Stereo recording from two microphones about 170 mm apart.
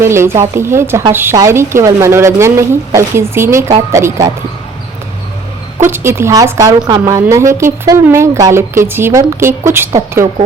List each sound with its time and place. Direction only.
0.0 s a woman's voice: 15° right (ahead or behind)
5.9 s speech: 15° right (ahead or behind)